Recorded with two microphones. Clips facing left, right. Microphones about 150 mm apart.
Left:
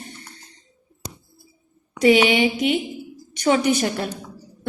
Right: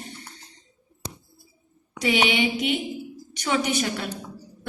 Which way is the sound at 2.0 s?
45° left (ahead or behind).